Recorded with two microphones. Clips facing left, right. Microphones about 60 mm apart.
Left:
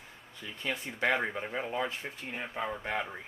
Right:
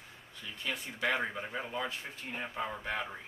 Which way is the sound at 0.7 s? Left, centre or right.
Left.